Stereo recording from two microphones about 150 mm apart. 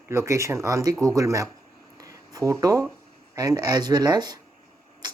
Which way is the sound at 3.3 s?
25° right (ahead or behind).